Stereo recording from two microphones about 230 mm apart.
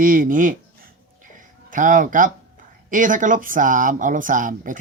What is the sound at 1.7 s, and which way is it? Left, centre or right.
Speech, right.